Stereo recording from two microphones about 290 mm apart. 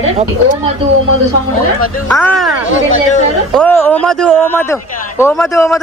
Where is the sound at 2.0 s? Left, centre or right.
Centre.